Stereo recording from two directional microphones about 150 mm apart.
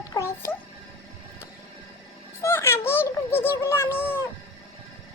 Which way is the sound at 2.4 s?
15° left (ahead or behind).